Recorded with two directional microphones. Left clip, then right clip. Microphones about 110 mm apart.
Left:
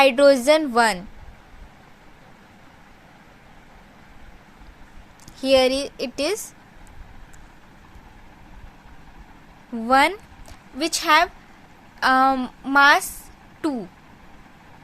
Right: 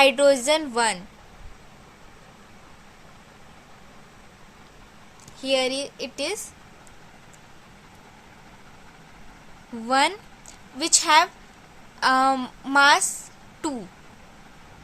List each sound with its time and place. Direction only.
0.0 s a woman's voice: 50° left (ahead or behind)
5.4 s speech: 70° left (ahead or behind)
9.8 s speech: 35° left (ahead or behind)